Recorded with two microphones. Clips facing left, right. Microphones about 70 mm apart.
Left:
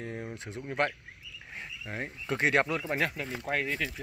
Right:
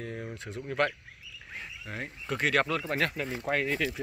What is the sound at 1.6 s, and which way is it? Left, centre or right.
Speech, left.